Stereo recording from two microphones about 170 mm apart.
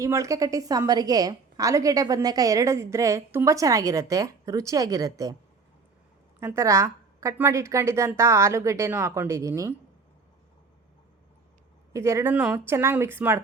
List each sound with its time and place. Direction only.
0.0 s a woman's voice: 20° right (ahead or behind)
6.4 s a woman's voice: 15° right (ahead or behind)
11.9 s a woman's voice: 15° right (ahead or behind)